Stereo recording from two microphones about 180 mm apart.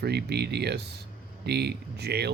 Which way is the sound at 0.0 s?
65° right (ahead or behind).